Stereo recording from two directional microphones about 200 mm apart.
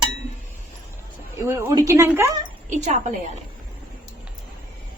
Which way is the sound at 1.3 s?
10° right (ahead or behind).